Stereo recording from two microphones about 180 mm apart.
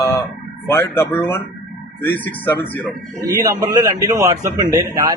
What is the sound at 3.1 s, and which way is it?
A man's voice, 20° right (ahead or behind).